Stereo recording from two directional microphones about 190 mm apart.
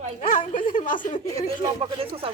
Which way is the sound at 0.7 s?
45° left (ahead or behind).